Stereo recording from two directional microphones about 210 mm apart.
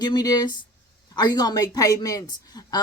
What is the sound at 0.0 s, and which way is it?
A woman's voice, 20° left (ahead or behind).